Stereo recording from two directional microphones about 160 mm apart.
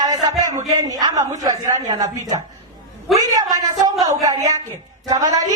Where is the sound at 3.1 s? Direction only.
20° right (ahead or behind).